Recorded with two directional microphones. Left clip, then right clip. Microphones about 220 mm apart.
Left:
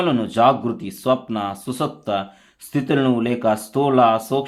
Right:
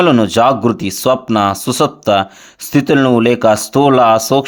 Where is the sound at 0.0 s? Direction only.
50° right (ahead or behind).